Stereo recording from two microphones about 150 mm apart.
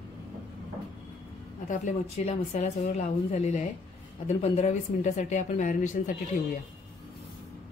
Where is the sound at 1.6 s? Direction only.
55° left (ahead or behind).